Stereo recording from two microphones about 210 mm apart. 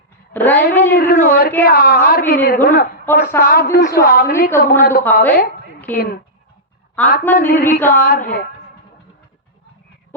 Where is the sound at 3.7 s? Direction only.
45° left (ahead or behind).